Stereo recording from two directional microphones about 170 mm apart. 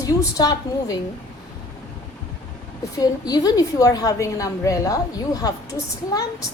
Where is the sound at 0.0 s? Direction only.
20° left (ahead or behind).